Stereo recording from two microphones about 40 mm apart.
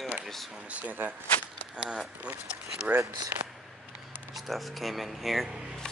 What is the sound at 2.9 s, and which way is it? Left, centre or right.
Speech, right.